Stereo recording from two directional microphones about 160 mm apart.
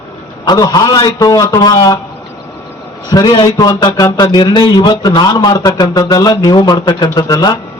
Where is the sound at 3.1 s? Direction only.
25° left (ahead or behind).